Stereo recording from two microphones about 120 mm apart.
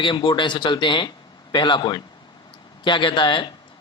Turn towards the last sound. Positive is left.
turn(degrees=40)  # may be behind; listen again after turning